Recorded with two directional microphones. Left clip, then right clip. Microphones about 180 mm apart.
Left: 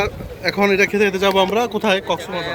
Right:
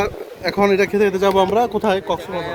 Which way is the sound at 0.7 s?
20° right (ahead or behind).